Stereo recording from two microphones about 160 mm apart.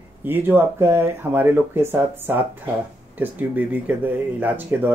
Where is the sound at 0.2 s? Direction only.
10° right (ahead or behind).